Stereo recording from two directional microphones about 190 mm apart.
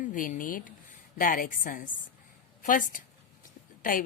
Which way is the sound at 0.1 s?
45° left (ahead or behind).